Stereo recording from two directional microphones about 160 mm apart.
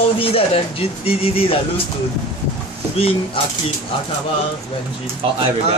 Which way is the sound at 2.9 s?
35° left (ahead or behind).